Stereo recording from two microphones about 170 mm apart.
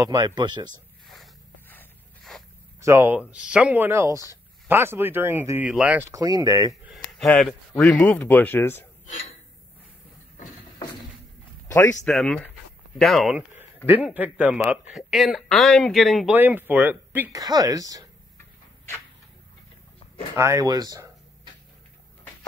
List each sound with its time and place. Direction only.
0.0 s speech: 20° right (ahead or behind)
1.0 s a sound: centre (ahead or behind)
2.8 s speech: 15° right (ahead or behind)
6.7 s a sound: centre (ahead or behind)
7.8 s speech: 5° left (ahead or behind)
11.6 s a sound: 15° left (ahead or behind)
12.0 s speech: 5° left (ahead or behind)
16.3 s speech: 10° right (ahead or behind)
17.4 s speech: 25° right (ahead or behind)
20.3 s speech: 15° right (ahead or behind)